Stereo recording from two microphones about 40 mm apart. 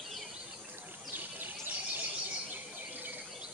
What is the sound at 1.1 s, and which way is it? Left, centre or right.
Bird, right.